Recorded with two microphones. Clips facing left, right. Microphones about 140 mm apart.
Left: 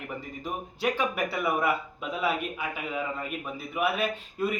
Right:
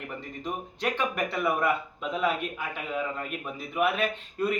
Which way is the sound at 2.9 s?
5° left (ahead or behind).